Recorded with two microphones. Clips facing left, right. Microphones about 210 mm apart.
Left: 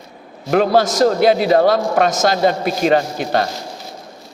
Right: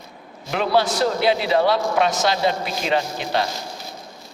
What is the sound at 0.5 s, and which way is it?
A man's voice, 45° left (ahead or behind).